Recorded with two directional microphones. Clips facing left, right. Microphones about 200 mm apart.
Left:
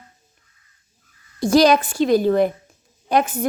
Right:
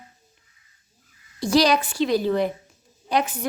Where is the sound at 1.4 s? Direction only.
50° left (ahead or behind).